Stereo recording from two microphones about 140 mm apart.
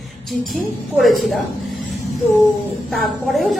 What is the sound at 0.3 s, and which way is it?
A woman's voice, centre (ahead or behind).